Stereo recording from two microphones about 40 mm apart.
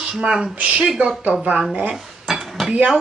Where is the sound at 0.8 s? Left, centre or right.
Centre.